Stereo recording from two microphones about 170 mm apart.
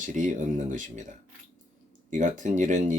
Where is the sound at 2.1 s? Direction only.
50° right (ahead or behind).